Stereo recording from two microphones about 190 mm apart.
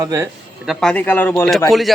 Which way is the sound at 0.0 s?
15° right (ahead or behind).